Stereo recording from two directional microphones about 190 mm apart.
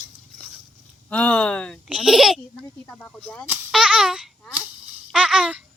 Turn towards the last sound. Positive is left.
turn(degrees=-5)  # may be behind; listen again after turning